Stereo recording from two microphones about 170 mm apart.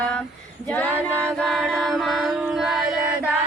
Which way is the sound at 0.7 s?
10° left (ahead or behind).